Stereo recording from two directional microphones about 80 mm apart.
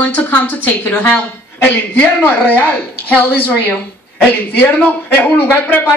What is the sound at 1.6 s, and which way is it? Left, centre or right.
A man's voice, centre.